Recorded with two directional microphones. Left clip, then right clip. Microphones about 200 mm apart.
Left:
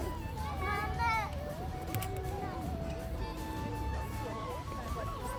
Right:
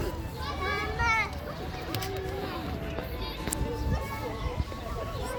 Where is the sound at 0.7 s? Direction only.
30° left (ahead or behind).